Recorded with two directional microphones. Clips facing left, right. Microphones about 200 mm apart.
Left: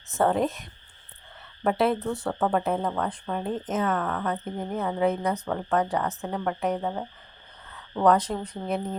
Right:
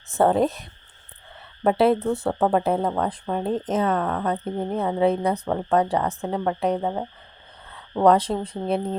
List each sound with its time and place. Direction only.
0.1 s speech: 35° right (ahead or behind)